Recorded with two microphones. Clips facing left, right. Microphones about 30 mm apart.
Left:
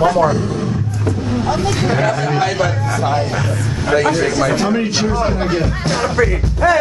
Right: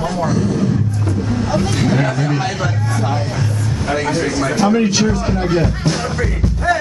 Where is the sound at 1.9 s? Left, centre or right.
Left.